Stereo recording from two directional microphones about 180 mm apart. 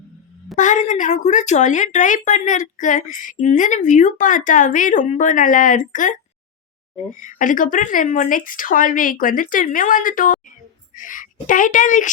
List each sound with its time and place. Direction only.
0.5 s speech: 45° left (ahead or behind)